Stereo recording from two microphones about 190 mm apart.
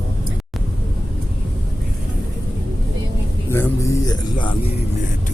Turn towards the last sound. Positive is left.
turn(degrees=25)  # may be behind; listen again after turning